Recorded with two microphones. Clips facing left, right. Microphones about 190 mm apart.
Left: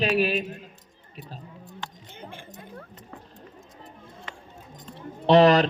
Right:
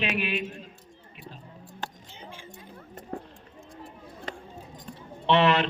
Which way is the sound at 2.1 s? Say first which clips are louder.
Left 3 dB; 55° left (ahead or behind).